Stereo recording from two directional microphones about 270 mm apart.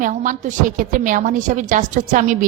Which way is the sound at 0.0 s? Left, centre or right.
Right.